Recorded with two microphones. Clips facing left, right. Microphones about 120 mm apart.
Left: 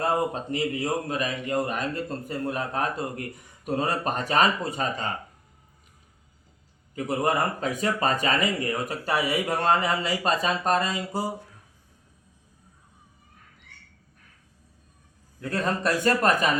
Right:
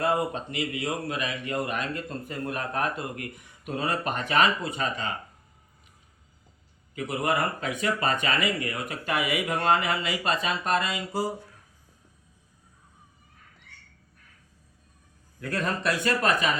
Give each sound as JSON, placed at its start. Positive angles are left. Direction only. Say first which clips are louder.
{"t": 0.0, "sound": "a man's voice", "louder": "left 1 dB", "side_deg": 40}
{"t": 6.9, "sound": "a man's voice", "louder": "left 2 dB", "side_deg": 40}
{"t": 15.4, "sound": "a man's voice", "louder": "left 2 dB", "side_deg": 30}